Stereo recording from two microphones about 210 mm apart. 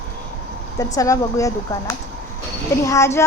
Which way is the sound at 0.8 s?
15° left (ahead or behind).